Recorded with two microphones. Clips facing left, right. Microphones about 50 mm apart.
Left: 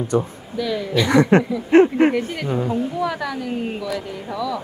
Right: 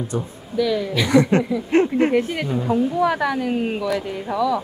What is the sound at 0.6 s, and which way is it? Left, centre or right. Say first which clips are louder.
Speech: right 1 dB; centre.